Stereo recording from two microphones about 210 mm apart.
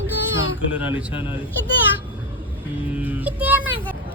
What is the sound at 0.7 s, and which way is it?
Speech, 5° right (ahead or behind).